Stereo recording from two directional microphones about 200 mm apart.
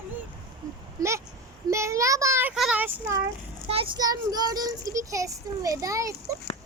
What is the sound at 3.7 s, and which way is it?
A child's voice, 25° right (ahead or behind).